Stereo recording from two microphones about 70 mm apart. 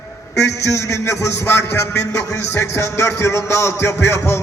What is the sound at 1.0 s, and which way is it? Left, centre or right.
Speech, left.